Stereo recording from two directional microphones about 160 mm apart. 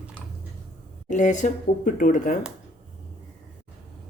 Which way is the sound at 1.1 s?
50° left (ahead or behind).